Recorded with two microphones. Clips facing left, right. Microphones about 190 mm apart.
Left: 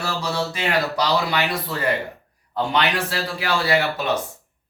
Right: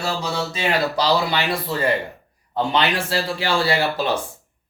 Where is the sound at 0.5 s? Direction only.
30° right (ahead or behind).